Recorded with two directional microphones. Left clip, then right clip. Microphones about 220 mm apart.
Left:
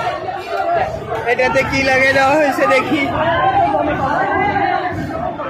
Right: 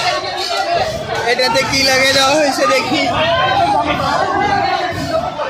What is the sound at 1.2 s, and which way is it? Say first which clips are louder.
Speech: even; 20° right (ahead or behind).